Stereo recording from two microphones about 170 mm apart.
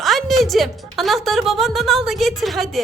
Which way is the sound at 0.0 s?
Centre (ahead or behind).